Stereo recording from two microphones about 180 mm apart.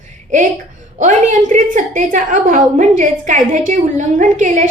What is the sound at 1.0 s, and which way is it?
A woman's voice, 45° right (ahead or behind).